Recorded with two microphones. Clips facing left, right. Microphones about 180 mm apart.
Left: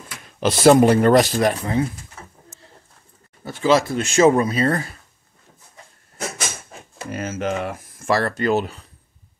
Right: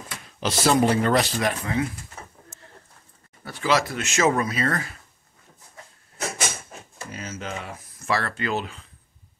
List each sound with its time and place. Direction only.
0.4 s speech: 55° left (ahead or behind); by 1.9 s 35° left (ahead or behind)
3.4 s speech: 25° left (ahead or behind)
7.0 s speech: 55° left (ahead or behind)